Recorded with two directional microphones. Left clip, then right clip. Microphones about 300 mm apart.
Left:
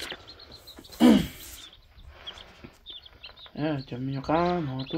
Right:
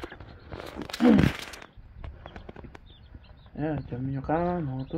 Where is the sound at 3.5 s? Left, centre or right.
Centre.